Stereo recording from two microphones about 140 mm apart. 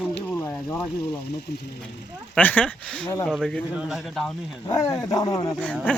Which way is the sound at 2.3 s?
10° left (ahead or behind).